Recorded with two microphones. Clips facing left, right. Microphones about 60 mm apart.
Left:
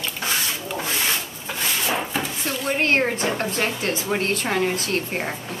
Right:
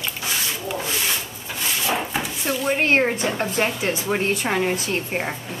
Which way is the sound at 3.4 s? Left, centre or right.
Centre.